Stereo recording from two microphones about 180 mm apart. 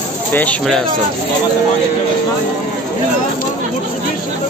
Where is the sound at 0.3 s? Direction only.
10° left (ahead or behind).